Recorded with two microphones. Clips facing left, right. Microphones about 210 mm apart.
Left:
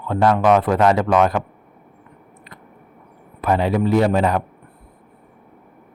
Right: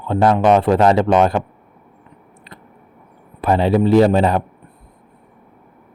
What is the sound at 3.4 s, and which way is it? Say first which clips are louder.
Speech: right 3 dB; 30° right (ahead or behind).